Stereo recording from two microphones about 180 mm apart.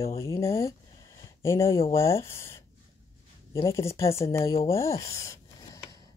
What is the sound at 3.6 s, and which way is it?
Speech, 15° left (ahead or behind).